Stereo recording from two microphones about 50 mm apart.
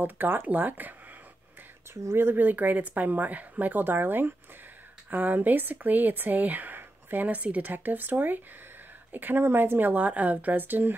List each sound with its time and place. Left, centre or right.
0.0 s speech: right
2.0 s speech: right
2.3 s speech: right